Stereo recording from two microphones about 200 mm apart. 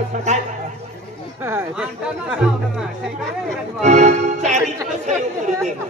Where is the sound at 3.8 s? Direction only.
35° right (ahead or behind).